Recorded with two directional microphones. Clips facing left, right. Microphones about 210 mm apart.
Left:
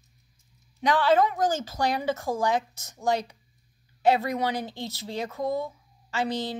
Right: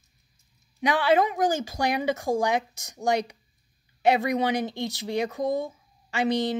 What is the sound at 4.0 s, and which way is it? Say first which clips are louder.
A woman's voice: right 1 dB; 15° right (ahead or behind).